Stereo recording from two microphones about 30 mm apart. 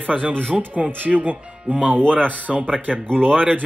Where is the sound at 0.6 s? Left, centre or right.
Right.